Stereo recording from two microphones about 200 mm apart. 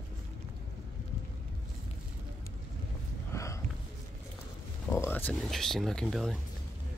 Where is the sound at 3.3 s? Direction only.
15° left (ahead or behind).